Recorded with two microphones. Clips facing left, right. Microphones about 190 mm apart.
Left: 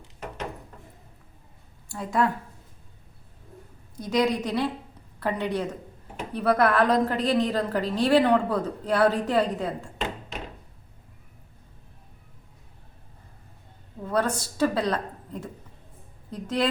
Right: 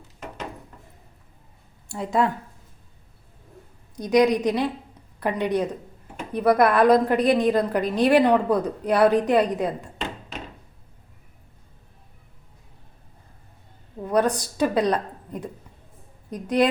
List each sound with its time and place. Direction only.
1.9 s speech: 25° right (ahead or behind)
3.9 s a woman's voice: 15° right (ahead or behind)
14.0 s a woman's voice: 15° right (ahead or behind)